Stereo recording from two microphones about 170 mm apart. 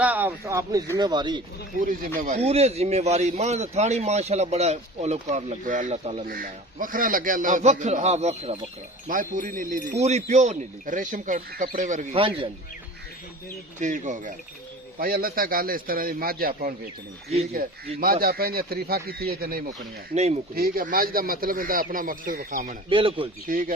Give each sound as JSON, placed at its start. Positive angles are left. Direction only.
{"t": 0.0, "sound": "speech", "side_deg": -10}
{"t": 1.8, "sound": "speech", "side_deg": -50}
{"t": 6.2, "sound": "speech", "side_deg": -55}
{"t": 9.0, "sound": "speech", "side_deg": -50}
{"t": 12.1, "sound": "speech", "side_deg": -30}
{"t": 13.7, "sound": "speech", "side_deg": -45}
{"t": 14.9, "sound": "speech", "side_deg": -60}
{"t": 20.1, "sound": "speech", "side_deg": -40}
{"t": 20.6, "sound": "speech", "side_deg": -60}
{"t": 22.9, "sound": "speech", "side_deg": -30}
{"t": 23.5, "sound": "speech", "side_deg": -55}